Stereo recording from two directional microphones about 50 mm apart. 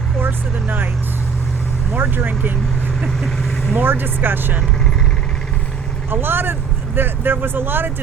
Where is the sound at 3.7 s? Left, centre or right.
Right.